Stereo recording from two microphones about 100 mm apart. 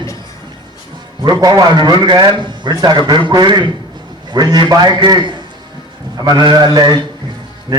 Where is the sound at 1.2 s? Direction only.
45° right (ahead or behind).